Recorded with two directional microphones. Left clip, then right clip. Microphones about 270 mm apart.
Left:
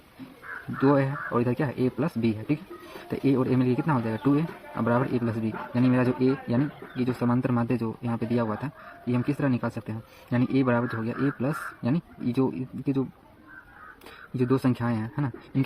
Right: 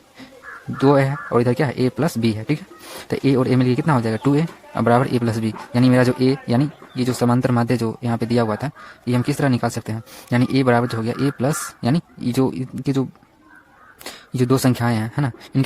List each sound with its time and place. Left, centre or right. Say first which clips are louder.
0.8 s speech: right 7 dB; right
14.3 s speech: right 7 dB; right